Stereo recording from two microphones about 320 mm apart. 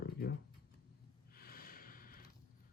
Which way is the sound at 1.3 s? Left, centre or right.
Left.